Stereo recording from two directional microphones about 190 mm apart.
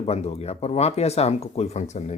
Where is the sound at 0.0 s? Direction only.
35° left (ahead or behind).